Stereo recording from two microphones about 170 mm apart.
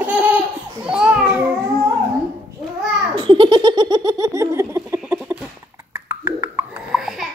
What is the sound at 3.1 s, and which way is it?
Laughter, 30° right (ahead or behind).